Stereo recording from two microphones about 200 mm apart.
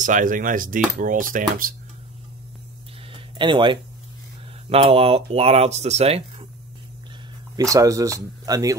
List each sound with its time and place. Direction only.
0.0 s speech: 40° right (ahead or behind)
3.1 s a sound: 25° right (ahead or behind)
4.6 s speech: 30° right (ahead or behind)
7.5 s speech: 15° right (ahead or behind)